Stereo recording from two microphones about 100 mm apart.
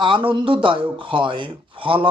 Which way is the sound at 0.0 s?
55° right (ahead or behind).